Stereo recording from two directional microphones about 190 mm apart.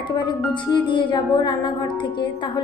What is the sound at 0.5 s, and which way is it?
A woman's voice, 25° left (ahead or behind).